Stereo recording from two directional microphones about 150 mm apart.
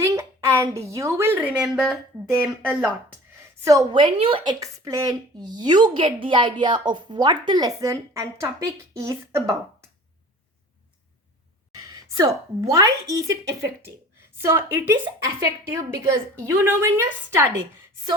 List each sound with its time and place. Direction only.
0.0 s a woman's voice: 20° right (ahead or behind)
3.6 s a woman's voice: 25° right (ahead or behind)
4.6 s a woman's voice: 20° right (ahead or behind)
11.8 s a woman's voice: 20° right (ahead or behind)